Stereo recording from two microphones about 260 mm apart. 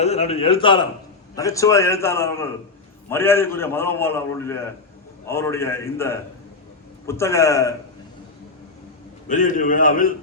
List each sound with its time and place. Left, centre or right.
0.0 s a man's voice: left
9.2 s a man's voice: left